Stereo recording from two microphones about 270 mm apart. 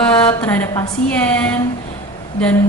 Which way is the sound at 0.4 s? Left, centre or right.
Centre.